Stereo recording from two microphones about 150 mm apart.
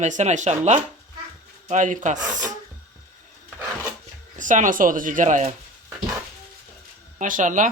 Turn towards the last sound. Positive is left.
turn(degrees=-55)  # may be behind; listen again after turning